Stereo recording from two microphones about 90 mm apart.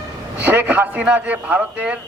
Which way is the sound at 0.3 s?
20° right (ahead or behind).